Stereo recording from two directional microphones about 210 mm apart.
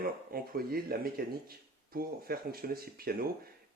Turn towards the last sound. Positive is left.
turn(degrees=-45)  # may be behind; listen again after turning